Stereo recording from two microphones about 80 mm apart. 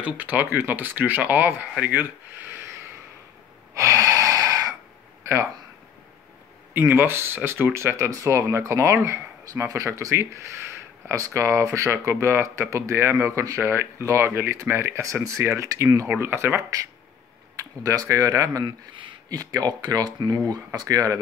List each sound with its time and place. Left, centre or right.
0.0 s speech: right
3.7 s gasp: right
5.2 s speech: right
6.7 s speech: right
7.7 s speech: right
16.1 s speech: right
18.0 s speech: right